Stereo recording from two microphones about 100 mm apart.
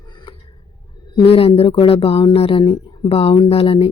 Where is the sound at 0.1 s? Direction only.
50° left (ahead or behind).